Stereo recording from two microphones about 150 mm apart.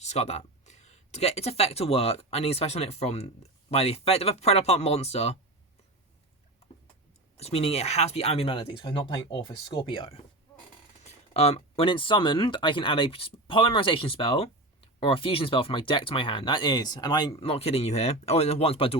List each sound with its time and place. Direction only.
0.0 s speech: 45° left (ahead or behind)
7.3 s speech: 40° left (ahead or behind)
11.0 s speech: 45° left (ahead or behind)